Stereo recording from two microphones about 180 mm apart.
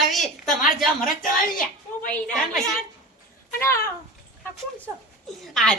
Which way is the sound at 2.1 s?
5° left (ahead or behind).